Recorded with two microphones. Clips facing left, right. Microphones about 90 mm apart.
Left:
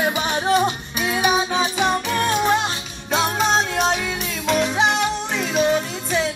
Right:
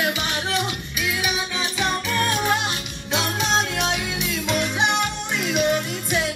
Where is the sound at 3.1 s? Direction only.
40° left (ahead or behind).